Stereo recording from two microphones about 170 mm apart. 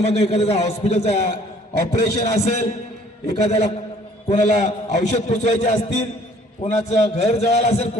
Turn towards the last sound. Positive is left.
turn(degrees=40)  # may be behind; listen again after turning